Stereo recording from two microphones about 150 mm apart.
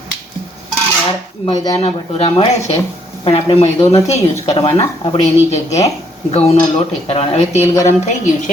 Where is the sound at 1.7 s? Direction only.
40° left (ahead or behind).